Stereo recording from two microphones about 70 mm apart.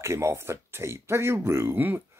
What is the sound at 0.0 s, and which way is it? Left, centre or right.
Speech, right.